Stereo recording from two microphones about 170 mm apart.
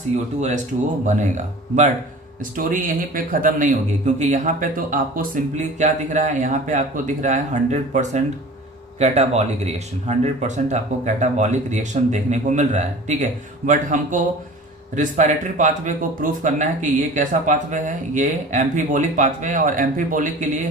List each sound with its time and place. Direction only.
0.3 s speech: 45° right (ahead or behind)